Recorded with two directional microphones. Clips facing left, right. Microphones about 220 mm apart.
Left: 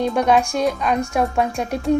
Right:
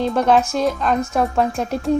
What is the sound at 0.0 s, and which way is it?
Speech, centre (ahead or behind).